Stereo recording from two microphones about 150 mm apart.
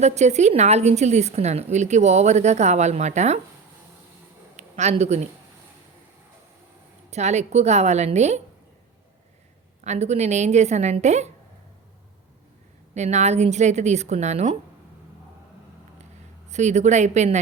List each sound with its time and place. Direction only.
0.0 s a woman's voice: 50° right (ahead or behind)
4.5 s a sound: 50° right (ahead or behind)
7.1 s a woman's voice: 50° right (ahead or behind)
9.8 s a woman's voice: 50° right (ahead or behind)
12.9 s a woman's voice: 50° right (ahead or behind)
16.5 s a woman's voice: 50° right (ahead or behind)